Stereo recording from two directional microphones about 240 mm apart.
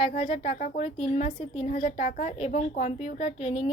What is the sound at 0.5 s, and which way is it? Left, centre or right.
Speech, left.